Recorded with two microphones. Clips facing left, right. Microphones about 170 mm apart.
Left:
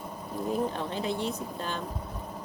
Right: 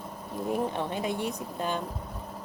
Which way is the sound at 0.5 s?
15° right (ahead or behind).